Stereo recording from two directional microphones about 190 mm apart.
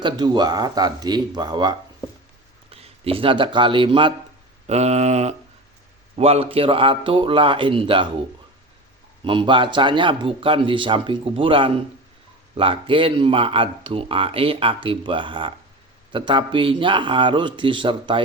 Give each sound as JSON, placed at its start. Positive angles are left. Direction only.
{"t": 0.0, "sound": "speech", "side_deg": -20}
{"t": 4.6, "sound": "mantra", "side_deg": -35}
{"t": 6.1, "sound": "speech", "side_deg": -35}
{"t": 9.2, "sound": "speech", "side_deg": -25}